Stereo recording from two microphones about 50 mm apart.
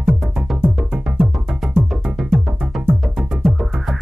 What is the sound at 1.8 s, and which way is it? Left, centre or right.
Music, centre.